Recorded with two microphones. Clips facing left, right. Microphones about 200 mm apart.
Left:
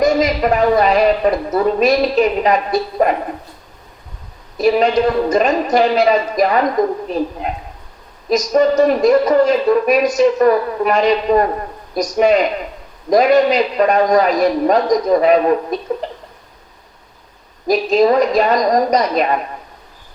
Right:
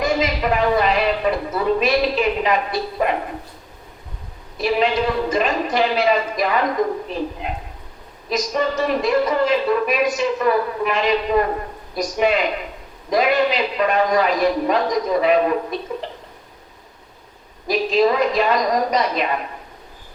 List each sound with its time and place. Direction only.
0.0 s speech: 40° left (ahead or behind)
4.5 s speech: 40° left (ahead or behind)
17.7 s speech: 40° left (ahead or behind)